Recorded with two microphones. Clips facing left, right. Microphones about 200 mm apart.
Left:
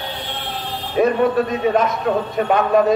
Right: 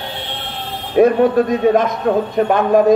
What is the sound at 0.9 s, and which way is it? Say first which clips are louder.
A man's voice: right 5 dB; 45° right (ahead or behind).